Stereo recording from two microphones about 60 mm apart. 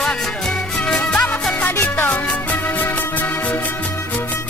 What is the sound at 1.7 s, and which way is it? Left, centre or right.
Music, left.